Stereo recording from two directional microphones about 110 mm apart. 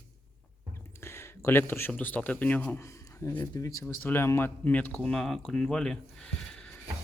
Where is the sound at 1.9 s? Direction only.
15° left (ahead or behind).